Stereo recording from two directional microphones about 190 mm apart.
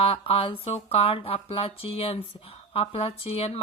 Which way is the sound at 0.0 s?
30° left (ahead or behind).